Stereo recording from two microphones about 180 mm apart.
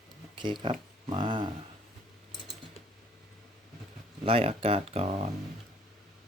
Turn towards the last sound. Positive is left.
turn(degrees=-35)  # may be behind; listen again after turning